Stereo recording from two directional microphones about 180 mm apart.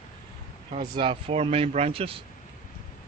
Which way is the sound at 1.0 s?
30° right (ahead or behind).